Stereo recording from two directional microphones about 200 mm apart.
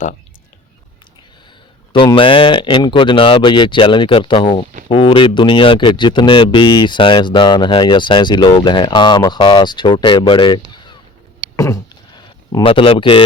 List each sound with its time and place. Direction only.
1.9 s speech: 25° left (ahead or behind)
10.7 s a sound: 20° left (ahead or behind)
12.5 s speech: 25° left (ahead or behind)